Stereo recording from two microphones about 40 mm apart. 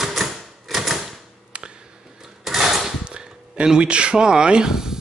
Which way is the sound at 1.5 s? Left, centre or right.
Right.